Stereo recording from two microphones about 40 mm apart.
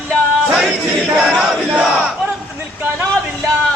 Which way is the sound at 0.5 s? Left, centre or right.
Right.